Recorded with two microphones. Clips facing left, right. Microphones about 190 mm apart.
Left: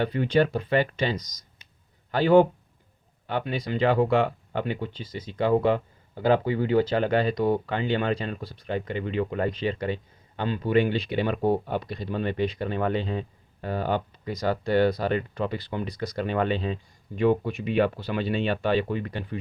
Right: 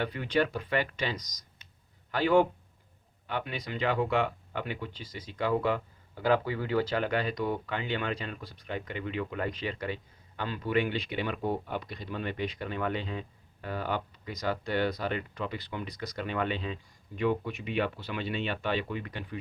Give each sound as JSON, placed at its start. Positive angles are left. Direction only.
{"t": 0.0, "sound": "speech", "side_deg": 30}